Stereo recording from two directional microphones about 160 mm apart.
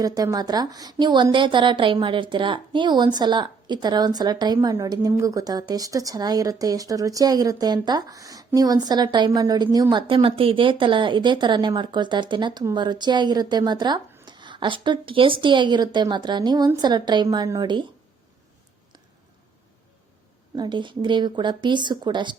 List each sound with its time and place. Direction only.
0.0 s a woman's voice: 20° right (ahead or behind)
20.6 s a woman's voice: 30° right (ahead or behind)